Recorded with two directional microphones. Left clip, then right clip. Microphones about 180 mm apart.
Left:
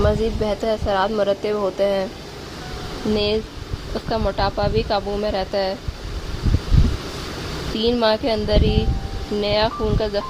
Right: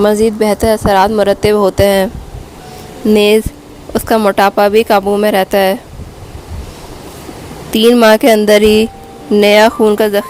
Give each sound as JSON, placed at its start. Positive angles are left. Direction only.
{"t": 0.0, "sound": "speech", "side_deg": -60}
{"t": 3.2, "sound": "speech", "side_deg": -70}
{"t": 7.9, "sound": "speech", "side_deg": -60}